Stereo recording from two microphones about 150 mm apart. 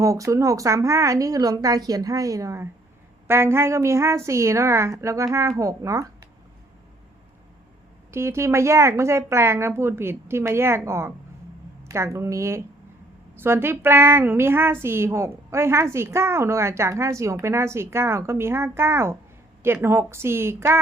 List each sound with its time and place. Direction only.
0.0 s a woman's voice: 20° right (ahead or behind)
8.1 s a woman's voice: 20° right (ahead or behind)